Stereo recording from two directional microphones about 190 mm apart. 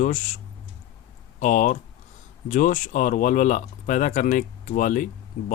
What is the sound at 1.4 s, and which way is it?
Speech, 40° left (ahead or behind).